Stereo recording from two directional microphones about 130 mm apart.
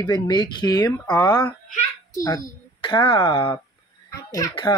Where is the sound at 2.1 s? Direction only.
25° left (ahead or behind).